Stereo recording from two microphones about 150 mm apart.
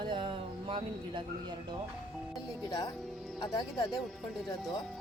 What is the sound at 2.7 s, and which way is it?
Speech, 25° left (ahead or behind).